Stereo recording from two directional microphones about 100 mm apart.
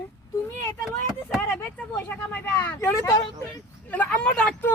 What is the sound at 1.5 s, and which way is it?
Speech, 25° left (ahead or behind).